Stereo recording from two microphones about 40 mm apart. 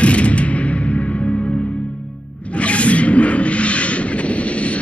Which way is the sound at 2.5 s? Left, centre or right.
Left.